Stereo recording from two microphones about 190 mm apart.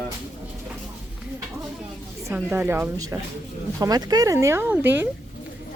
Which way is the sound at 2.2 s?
10° right (ahead or behind).